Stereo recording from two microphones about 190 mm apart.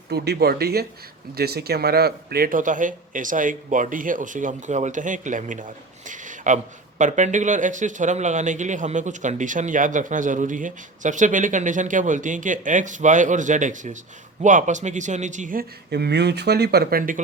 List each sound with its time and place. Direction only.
0.1 s a man's voice: 55° right (ahead or behind)